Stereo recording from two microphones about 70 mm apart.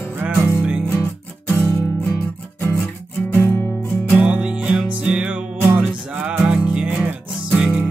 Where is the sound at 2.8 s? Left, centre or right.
Left.